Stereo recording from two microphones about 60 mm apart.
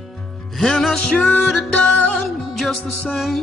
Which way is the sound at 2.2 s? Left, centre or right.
Centre.